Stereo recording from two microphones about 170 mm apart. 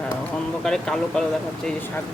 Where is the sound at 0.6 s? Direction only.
5° left (ahead or behind).